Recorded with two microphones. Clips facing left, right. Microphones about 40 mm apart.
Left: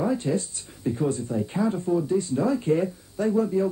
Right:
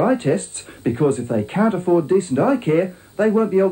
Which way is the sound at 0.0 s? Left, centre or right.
Right.